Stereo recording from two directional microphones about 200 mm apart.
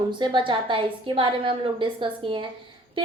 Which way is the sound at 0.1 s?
25° right (ahead or behind).